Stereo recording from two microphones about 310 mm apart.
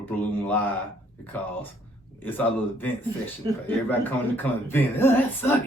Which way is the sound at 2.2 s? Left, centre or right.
Centre.